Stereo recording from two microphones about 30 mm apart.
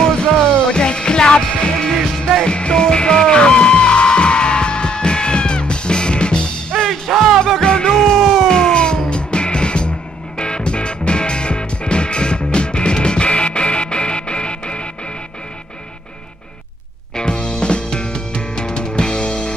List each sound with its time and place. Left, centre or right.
0.2 s music: left
1.9 s music: centre
2.4 s music: left
6.9 s music: centre
7.6 s music: left
7.9 s music: centre
8.2 s music: centre
8.5 s music: left
17.1 s music: left